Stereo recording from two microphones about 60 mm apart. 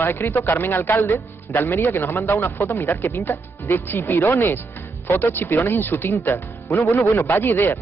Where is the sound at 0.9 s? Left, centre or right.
Left.